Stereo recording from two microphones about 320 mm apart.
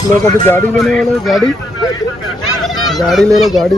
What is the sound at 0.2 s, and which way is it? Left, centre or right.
Speech, centre.